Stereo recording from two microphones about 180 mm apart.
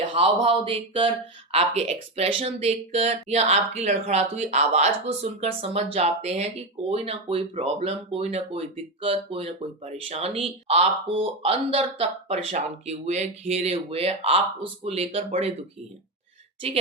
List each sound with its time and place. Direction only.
0.1 s speech: 30° right (ahead or behind)